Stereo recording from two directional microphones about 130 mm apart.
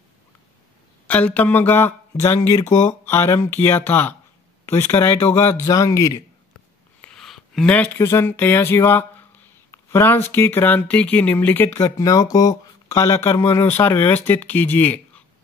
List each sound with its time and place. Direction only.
1.0 s speech: 10° left (ahead or behind)
7.0 s speech: 5° left (ahead or behind)